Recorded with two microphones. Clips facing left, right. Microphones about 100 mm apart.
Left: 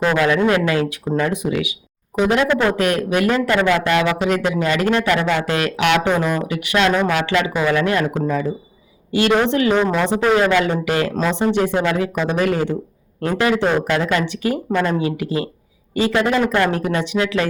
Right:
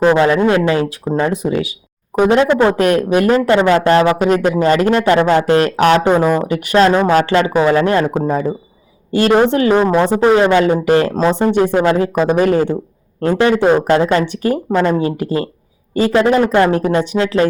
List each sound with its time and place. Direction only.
0.0 s speech: 30° right (ahead or behind)
2.7 s speech: 40° right (ahead or behind)
14.3 s speech: 40° right (ahead or behind)
17.0 s speech: 40° right (ahead or behind)